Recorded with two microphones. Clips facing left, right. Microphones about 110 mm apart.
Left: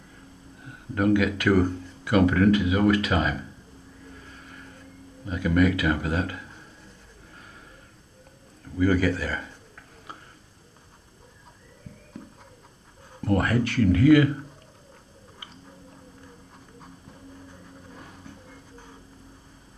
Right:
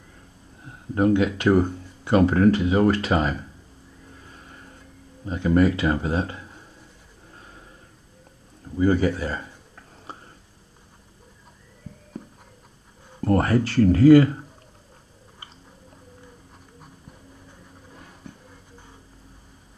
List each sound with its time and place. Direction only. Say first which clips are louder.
0.7 s speech: right 2 dB; 25° right (ahead or behind)
5.2 s speech: right 3 dB; 30° right (ahead or behind)
8.7 s a sound: right 2 dB; 25° right (ahead or behind)
13.2 s speech: right 3 dB; 35° right (ahead or behind)